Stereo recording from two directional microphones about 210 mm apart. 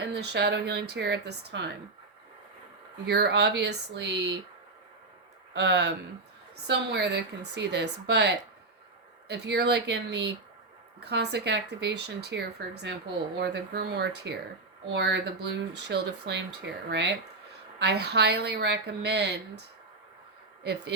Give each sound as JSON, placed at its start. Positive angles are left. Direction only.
{"t": 0.0, "sound": "speech", "side_deg": -50}
{"t": 3.1, "sound": "speech", "side_deg": -50}
{"t": 5.5, "sound": "speech", "side_deg": -55}